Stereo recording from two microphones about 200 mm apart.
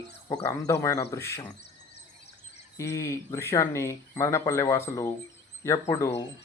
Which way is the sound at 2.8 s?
15° left (ahead or behind).